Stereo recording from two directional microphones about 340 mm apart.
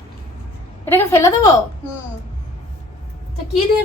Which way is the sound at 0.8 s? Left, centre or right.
Centre.